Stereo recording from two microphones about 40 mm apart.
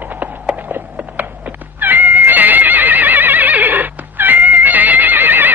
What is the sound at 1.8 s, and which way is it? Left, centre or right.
Neigh, right.